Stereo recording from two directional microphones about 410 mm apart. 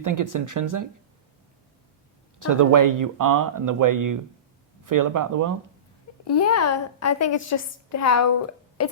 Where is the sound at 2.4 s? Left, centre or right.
Right.